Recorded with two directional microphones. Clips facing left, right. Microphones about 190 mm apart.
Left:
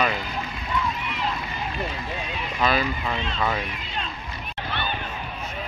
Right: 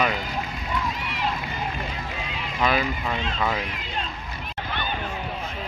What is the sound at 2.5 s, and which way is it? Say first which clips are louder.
Speech: even; 10° right (ahead or behind).